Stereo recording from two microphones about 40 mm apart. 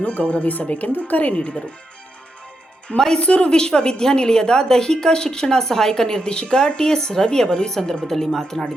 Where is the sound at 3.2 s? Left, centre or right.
Left.